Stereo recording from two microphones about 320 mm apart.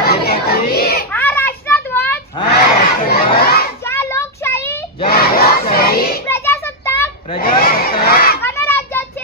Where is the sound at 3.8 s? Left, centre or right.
Centre.